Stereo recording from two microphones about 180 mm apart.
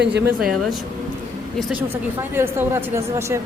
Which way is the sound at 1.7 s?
10° right (ahead or behind).